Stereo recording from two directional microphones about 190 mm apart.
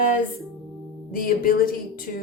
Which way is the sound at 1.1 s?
50° left (ahead or behind).